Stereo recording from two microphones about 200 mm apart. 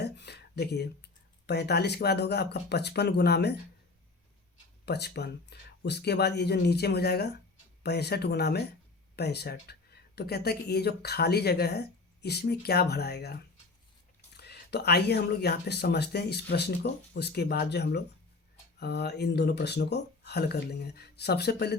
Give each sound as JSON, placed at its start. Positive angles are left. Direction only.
{"t": 0.0, "sound": "a sound", "side_deg": 55}
{"t": 1.5, "sound": "speech", "side_deg": 55}
{"t": 4.9, "sound": "speech", "side_deg": 55}